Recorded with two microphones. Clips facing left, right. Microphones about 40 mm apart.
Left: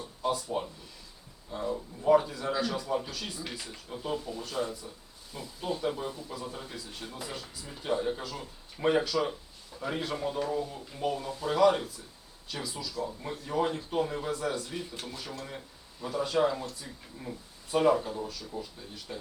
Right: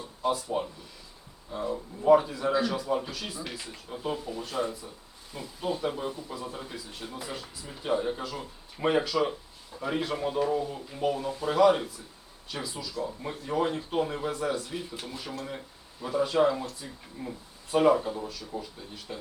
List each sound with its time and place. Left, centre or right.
0.2 s speech: centre
1.5 s speech: centre